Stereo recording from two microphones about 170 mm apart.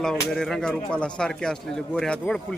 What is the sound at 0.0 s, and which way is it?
Speech, 5° left (ahead or behind).